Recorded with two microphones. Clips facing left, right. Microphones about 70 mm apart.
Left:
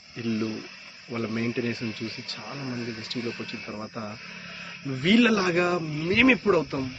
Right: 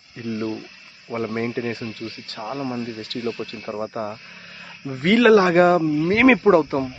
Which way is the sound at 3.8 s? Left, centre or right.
Right.